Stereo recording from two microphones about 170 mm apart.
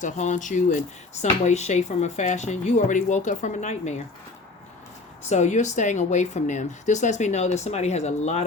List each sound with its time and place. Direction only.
0.0 s speech: 45° left (ahead or behind)
5.3 s speech: 45° left (ahead or behind)